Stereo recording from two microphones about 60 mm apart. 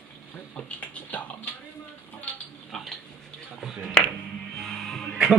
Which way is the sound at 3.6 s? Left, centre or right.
Centre.